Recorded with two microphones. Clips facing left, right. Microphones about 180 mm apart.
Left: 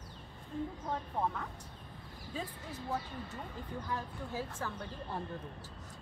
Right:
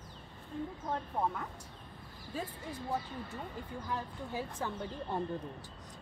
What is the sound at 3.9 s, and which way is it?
Speech, 15° right (ahead or behind).